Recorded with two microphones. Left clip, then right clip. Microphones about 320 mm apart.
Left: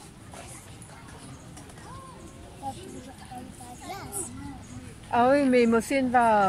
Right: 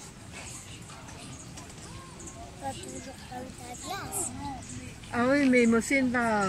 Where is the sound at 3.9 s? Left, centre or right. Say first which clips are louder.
Right 2 dB; centre.